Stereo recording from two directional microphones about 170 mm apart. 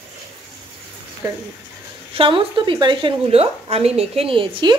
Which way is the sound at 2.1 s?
30° right (ahead or behind).